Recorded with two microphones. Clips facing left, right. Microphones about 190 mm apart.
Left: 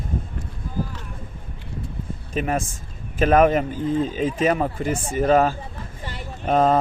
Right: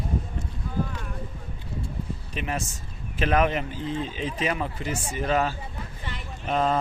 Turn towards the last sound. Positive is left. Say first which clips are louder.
# left 6 dB
turn(degrees=45)  # may be behind; listen again after turning